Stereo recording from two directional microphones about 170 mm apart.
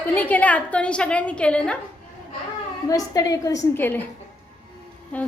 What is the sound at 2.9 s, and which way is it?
A woman's voice, 20° left (ahead or behind).